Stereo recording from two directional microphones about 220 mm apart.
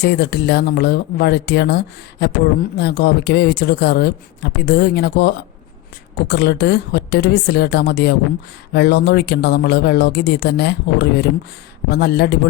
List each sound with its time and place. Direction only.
0.0 s speech: 50° left (ahead or behind)